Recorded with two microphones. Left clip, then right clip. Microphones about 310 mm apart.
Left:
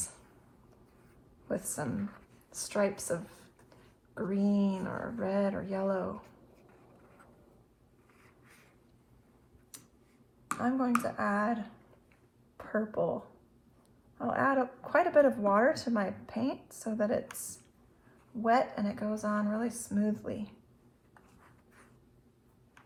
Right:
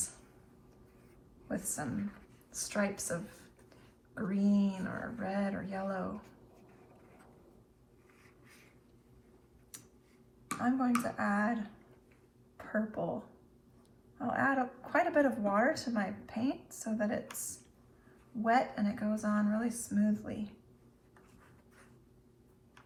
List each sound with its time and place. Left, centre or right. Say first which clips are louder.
1.5 s speech: left 3 dB; centre
10.5 s speech: left 2 dB; centre
12.5 s a sound: left 4 dB; centre
14.2 s speech: left 3 dB; centre
18.4 s speech: left 2 dB; centre